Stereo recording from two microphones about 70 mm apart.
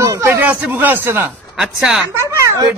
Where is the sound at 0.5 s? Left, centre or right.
Right.